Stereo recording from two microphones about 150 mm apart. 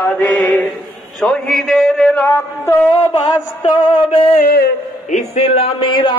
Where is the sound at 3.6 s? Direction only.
30° left (ahead or behind).